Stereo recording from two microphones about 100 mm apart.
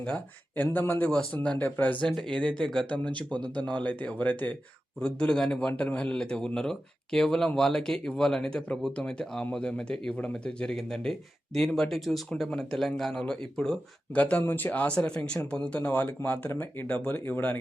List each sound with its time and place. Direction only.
0.5 s speech: 20° left (ahead or behind)